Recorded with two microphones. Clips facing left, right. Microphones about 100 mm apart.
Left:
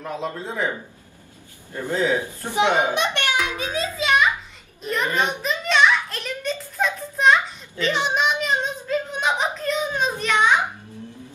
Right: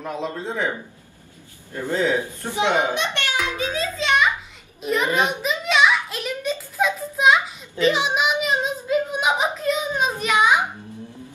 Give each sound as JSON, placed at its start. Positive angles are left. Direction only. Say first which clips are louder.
{"t": 0.0, "sound": "a man's voice", "louder": "right 1 dB", "side_deg": 0}
{"t": 1.7, "sound": "speech", "louder": "even", "side_deg": 15}
{"t": 4.0, "sound": "a sound", "louder": "left 1 dB", "side_deg": 0}